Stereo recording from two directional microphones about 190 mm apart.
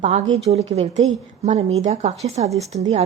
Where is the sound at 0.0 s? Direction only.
35° right (ahead or behind).